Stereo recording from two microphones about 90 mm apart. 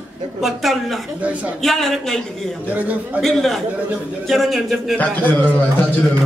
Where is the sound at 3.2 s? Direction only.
5° left (ahead or behind).